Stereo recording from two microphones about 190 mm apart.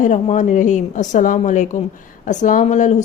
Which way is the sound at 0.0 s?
40° left (ahead or behind).